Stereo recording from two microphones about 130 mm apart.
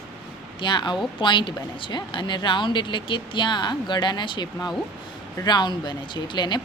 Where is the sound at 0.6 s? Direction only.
35° left (ahead or behind).